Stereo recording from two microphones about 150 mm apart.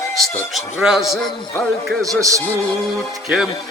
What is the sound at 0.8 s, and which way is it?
Speech, 5° right (ahead or behind).